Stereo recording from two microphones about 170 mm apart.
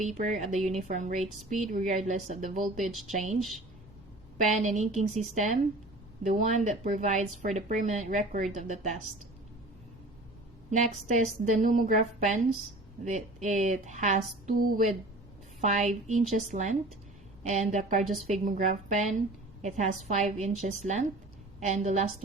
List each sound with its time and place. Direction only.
0.2 s a woman's voice: 45° right (ahead or behind)
4.4 s a woman's voice: 45° right (ahead or behind)
10.7 s a woman's voice: 45° right (ahead or behind)